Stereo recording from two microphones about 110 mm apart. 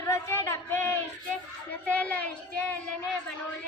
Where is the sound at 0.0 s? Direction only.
25° left (ahead or behind).